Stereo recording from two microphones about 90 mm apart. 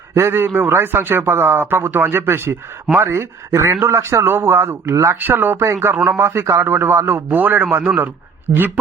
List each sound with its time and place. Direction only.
0.1 s a man's voice: 25° right (ahead or behind)